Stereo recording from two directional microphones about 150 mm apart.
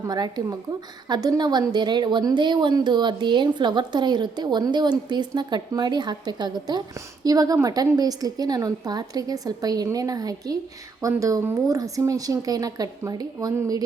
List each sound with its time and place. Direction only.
0.1 s a woman's voice: 25° right (ahead or behind)